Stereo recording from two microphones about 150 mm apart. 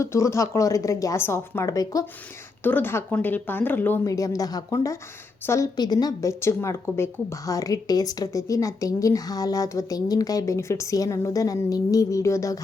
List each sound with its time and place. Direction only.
0.0 s a woman's voice: 20° left (ahead or behind)
2.6 s a woman's voice: 15° left (ahead or behind)